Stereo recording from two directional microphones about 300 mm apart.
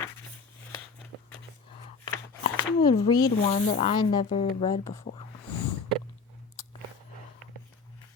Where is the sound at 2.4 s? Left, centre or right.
Centre.